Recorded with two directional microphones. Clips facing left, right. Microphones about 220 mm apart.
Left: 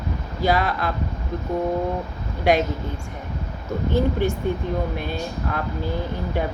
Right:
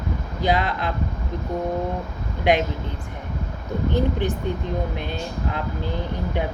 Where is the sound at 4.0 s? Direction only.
15° right (ahead or behind).